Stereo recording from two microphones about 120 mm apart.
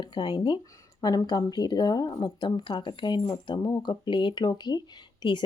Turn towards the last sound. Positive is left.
turn(degrees=40)  # may be behind; listen again after turning